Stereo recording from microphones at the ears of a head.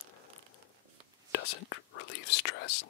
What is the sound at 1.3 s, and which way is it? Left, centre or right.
Speech, left.